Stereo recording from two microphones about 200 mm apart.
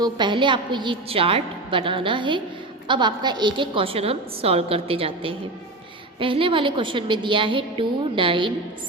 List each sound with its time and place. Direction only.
0.0 s a woman's voice: 25° right (ahead or behind)